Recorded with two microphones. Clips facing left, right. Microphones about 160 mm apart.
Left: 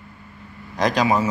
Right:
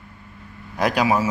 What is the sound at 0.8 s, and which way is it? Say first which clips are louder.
Speech: even; 10° right (ahead or behind).